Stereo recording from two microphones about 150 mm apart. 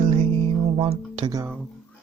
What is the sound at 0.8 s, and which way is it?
Speech, 40° right (ahead or behind).